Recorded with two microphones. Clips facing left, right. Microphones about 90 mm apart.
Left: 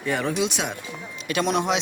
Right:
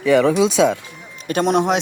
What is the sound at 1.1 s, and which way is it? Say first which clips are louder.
Speech: right 6 dB; 45° right (ahead or behind).